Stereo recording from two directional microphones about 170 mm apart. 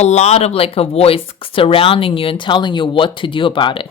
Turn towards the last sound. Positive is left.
turn(degrees=30)  # may be behind; listen again after turning